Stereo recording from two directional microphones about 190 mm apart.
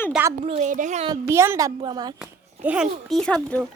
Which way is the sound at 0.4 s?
35° right (ahead or behind).